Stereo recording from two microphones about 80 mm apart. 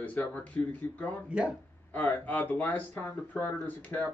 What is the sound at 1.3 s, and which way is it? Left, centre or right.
Mantra, centre.